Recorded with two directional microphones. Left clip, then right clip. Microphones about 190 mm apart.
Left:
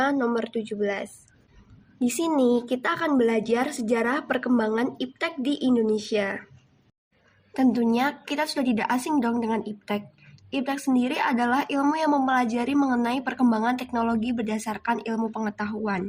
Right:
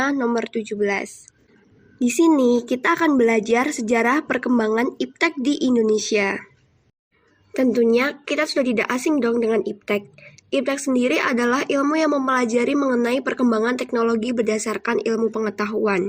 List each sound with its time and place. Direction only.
0.0 s speech: 25° right (ahead or behind)
7.5 s speech: 20° right (ahead or behind)